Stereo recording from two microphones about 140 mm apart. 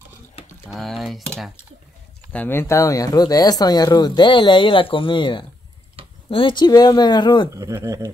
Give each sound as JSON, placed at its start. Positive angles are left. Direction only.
{"t": 0.7, "sound": "speech", "side_deg": 0}
{"t": 2.3, "sound": "speech", "side_deg": 15}
{"t": 7.5, "sound": "speech", "side_deg": -20}